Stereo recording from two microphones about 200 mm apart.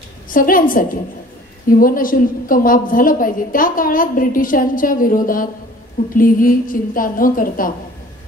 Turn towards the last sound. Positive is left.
turn(degrees=45)  # may be behind; listen again after turning